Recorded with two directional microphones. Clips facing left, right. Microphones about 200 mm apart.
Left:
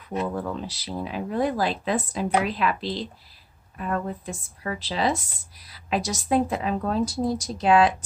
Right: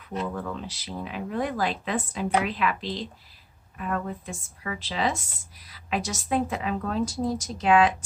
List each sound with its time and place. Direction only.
0.3 s speech: 35° left (ahead or behind)